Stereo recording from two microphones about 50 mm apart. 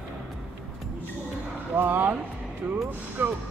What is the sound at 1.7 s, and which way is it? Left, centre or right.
Speech, right.